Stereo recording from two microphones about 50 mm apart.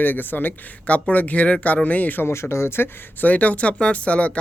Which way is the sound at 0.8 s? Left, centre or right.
Left.